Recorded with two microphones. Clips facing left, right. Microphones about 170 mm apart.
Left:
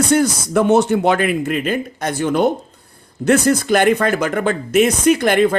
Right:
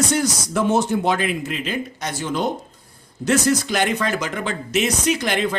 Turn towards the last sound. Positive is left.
turn(degrees=50)  # may be behind; listen again after turning